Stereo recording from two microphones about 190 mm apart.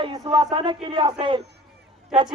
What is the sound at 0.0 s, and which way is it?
A man's voice, 20° right (ahead or behind).